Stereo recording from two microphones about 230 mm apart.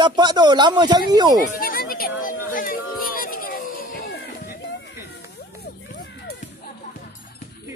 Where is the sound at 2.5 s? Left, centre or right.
Left.